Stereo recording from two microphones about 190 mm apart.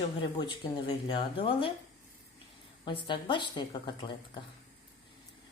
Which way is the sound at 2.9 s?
25° left (ahead or behind).